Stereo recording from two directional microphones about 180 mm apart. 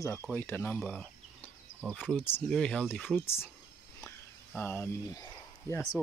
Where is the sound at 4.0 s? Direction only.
10° left (ahead or behind).